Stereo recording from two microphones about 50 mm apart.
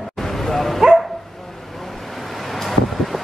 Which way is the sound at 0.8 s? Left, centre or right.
Centre.